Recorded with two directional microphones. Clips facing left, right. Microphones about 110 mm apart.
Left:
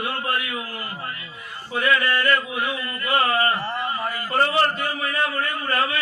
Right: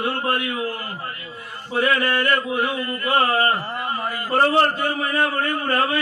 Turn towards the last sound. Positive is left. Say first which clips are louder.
# right 3 dB
turn(degrees=-30)  # may be behind; listen again after turning